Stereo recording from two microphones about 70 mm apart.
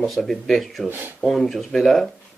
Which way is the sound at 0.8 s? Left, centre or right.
Right.